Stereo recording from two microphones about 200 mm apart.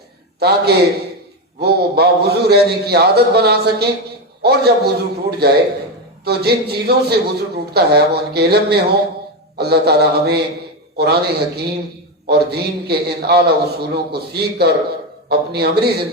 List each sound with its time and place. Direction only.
0.3 s a man's voice: 55° right (ahead or behind)